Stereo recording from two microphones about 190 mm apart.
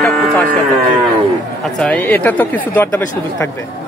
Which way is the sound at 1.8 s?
10° left (ahead or behind).